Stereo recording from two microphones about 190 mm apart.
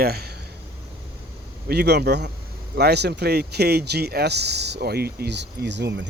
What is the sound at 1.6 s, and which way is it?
Speech, 60° right (ahead or behind).